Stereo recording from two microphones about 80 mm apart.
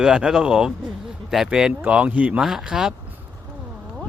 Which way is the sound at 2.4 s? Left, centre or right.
Centre.